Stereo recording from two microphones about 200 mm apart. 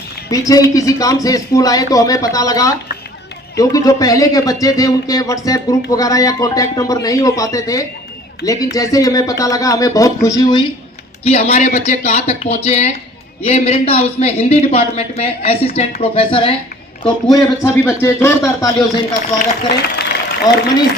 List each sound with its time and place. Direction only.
0.3 s a man's voice: 15° left (ahead or behind)
11.3 s a woman's voice: 35° left (ahead or behind)
17.3 s a man's voice: 15° left (ahead or behind)
19.4 s a man's voice: 55° left (ahead or behind)
20.5 s a woman's voice: 20° left (ahead or behind)